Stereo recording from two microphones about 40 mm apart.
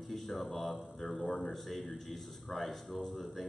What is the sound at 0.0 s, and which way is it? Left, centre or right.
A man's voice, centre.